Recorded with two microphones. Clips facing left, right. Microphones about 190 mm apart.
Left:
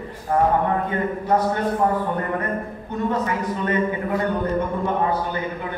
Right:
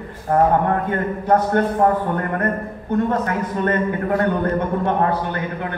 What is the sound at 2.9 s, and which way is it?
A man's voice, 55° right (ahead or behind).